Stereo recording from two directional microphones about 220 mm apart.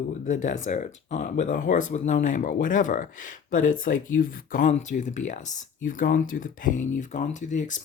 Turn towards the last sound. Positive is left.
turn(degrees=35)  # may be behind; listen again after turning